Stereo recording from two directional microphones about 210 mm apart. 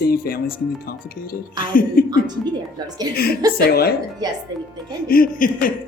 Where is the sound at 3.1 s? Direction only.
20° right (ahead or behind).